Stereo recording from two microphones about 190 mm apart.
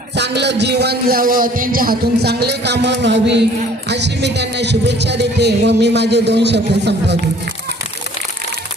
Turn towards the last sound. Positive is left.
turn(degrees=-65)  # may be behind; listen again after turning